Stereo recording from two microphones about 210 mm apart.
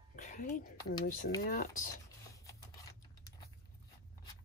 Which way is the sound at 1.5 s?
40° left (ahead or behind).